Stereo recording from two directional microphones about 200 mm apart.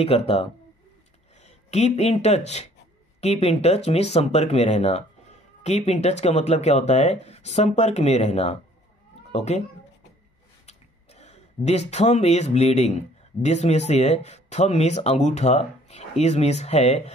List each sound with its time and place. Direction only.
0.0 s speech: 30° left (ahead or behind)
10.7 s a sound: 35° left (ahead or behind)
13.4 s speech: 35° left (ahead or behind)